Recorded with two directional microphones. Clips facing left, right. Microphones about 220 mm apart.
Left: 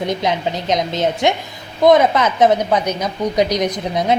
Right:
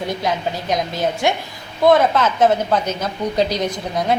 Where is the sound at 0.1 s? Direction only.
20° left (ahead or behind).